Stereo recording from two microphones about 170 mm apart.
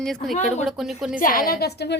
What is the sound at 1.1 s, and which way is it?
Speech, 55° left (ahead or behind).